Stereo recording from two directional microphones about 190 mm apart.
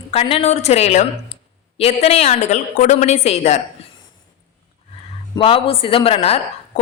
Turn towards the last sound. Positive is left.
turn(degrees=30)  # may be behind; listen again after turning